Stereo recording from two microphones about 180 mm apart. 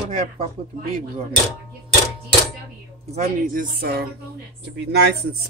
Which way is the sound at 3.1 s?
45° right (ahead or behind).